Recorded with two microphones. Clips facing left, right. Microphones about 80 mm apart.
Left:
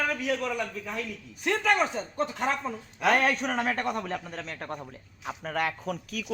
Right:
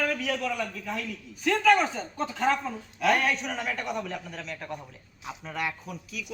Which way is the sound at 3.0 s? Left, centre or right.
Left.